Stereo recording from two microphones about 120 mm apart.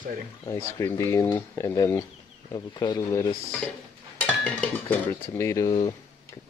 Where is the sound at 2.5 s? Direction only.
35° left (ahead or behind).